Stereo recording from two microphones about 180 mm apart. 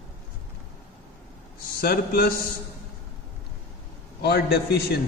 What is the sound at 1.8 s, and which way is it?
Speech, 55° left (ahead or behind).